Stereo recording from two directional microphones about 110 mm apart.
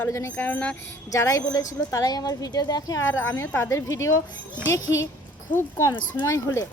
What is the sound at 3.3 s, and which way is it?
A woman's voice, 20° left (ahead or behind).